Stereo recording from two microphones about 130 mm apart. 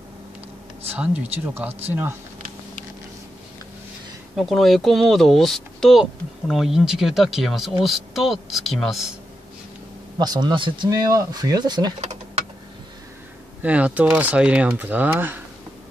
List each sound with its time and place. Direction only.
0.9 s speech: 10° right (ahead or behind)
4.4 s speech: centre (ahead or behind)
10.1 s speech: 30° right (ahead or behind)
10.9 s speech: 25° right (ahead or behind)
12.0 s typing: 55° right (ahead or behind)
13.6 s speech: 10° right (ahead or behind)